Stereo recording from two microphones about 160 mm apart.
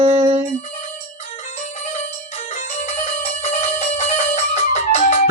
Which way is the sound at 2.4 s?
50° left (ahead or behind).